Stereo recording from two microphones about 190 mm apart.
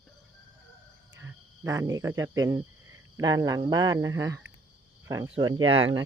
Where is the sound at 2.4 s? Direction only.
20° right (ahead or behind).